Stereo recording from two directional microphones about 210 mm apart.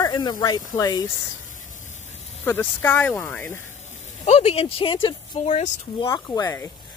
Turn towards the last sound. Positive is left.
turn(degrees=15)  # may be behind; listen again after turning